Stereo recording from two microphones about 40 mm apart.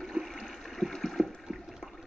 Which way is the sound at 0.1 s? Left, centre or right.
Centre.